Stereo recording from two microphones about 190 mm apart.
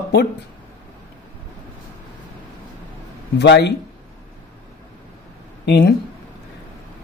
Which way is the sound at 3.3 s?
65° left (ahead or behind).